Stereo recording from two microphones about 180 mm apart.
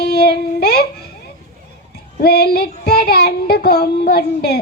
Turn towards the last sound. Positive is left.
turn(degrees=60)  # may be behind; listen again after turning